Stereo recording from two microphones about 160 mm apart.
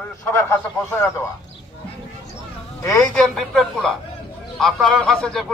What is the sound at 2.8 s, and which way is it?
Speech, 15° left (ahead or behind).